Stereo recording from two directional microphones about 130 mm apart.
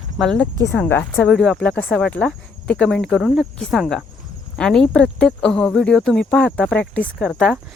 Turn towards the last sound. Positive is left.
turn(degrees=5)  # may be behind; listen again after turning